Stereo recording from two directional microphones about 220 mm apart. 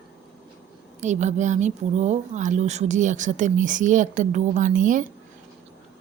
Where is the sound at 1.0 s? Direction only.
30° right (ahead or behind).